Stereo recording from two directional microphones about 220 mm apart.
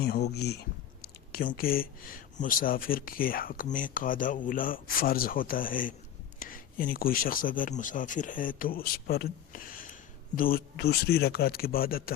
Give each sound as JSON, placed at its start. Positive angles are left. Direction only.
{"t": 0.0, "sound": "speech", "side_deg": 45}